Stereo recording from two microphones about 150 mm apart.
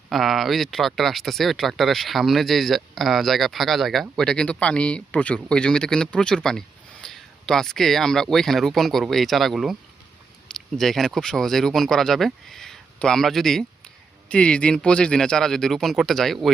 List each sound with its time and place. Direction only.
0.1 s a man's voice: centre (ahead or behind)